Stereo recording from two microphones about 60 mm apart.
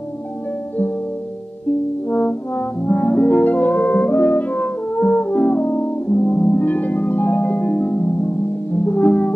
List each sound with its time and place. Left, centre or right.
2.0 s french horn: left
8.8 s music: left